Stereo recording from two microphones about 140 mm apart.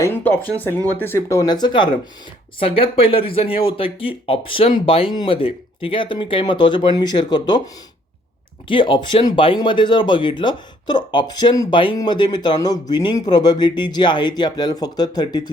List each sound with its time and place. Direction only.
0.0 s speech: 15° left (ahead or behind); by 7.6 s 30° left (ahead or behind)
8.6 s speech: 35° left (ahead or behind)
11.7 s speech: 35° left (ahead or behind)